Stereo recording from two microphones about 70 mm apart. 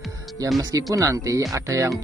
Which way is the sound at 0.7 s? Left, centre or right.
Right.